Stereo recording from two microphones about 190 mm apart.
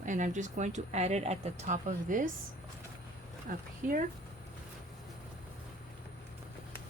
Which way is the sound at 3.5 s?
50° right (ahead or behind).